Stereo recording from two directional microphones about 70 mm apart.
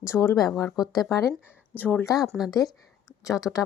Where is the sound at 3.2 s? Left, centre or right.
Left.